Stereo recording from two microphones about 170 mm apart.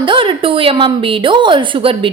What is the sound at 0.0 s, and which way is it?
A woman's voice, 30° right (ahead or behind).